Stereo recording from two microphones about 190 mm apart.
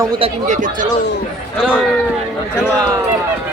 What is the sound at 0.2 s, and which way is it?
Speech, 40° right (ahead or behind).